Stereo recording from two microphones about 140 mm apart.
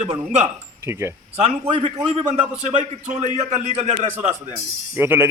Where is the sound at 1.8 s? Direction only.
45° right (ahead or behind).